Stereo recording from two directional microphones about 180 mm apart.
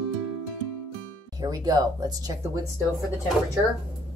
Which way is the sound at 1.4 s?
20° right (ahead or behind).